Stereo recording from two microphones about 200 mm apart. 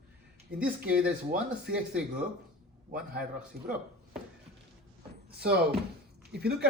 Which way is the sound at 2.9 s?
50° right (ahead or behind).